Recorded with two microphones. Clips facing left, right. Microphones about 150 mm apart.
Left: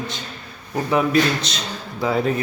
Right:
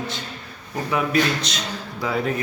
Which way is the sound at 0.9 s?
30° left (ahead or behind).